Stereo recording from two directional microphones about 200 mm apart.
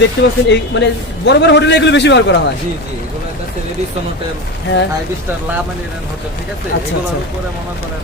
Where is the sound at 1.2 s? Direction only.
60° left (ahead or behind).